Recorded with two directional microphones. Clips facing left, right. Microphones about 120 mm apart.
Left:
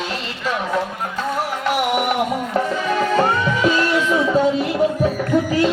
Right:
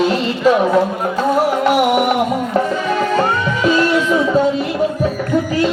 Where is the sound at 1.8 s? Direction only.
40° right (ahead or behind).